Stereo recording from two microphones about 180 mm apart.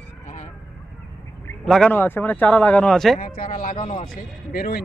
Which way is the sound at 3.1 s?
50° left (ahead or behind).